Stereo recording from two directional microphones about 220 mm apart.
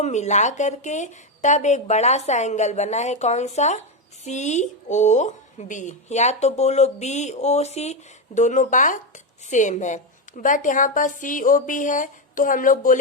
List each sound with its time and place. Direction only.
0.0 s a woman's voice: 30° left (ahead or behind)